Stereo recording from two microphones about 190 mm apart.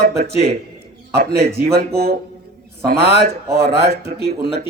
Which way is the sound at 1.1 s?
60° right (ahead or behind).